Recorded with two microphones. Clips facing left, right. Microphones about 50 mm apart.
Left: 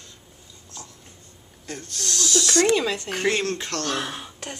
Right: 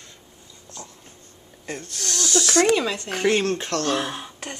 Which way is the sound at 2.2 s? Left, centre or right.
Right.